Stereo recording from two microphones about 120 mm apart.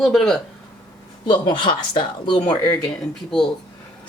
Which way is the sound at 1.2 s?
40° left (ahead or behind).